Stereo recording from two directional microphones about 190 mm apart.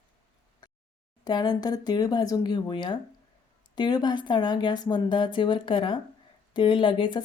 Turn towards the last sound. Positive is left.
turn(degrees=25)  # may be behind; listen again after turning